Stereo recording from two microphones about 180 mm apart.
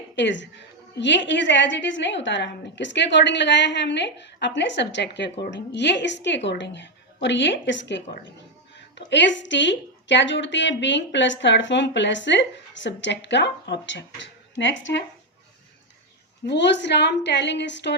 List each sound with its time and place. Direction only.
0.2 s a woman's voice: 85° left
16.5 s a woman's voice: 75° left (ahead or behind)